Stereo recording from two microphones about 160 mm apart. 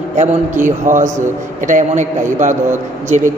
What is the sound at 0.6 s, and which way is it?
Speech, 55° right (ahead or behind).